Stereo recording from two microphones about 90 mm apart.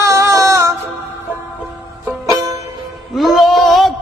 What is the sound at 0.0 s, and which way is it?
Music, 35° right (ahead or behind).